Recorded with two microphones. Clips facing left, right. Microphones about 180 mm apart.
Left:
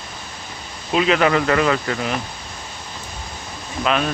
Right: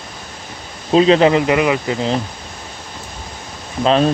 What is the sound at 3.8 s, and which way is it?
Speech, 30° right (ahead or behind).